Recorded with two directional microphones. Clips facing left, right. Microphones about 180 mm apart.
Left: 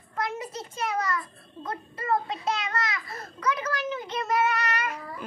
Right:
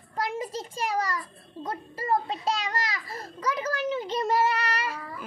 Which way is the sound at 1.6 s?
30° right (ahead or behind).